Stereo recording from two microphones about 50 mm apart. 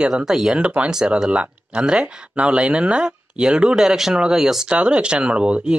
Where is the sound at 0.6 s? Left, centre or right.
Right.